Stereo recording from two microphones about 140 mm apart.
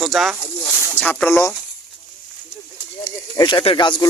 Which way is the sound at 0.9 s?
10° left (ahead or behind).